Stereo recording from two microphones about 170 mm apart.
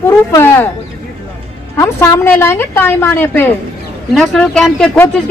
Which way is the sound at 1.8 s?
15° left (ahead or behind).